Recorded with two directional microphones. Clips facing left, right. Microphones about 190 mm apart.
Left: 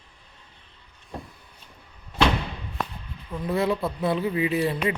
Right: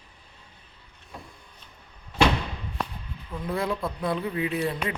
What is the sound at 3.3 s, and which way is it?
Speech, centre (ahead or behind).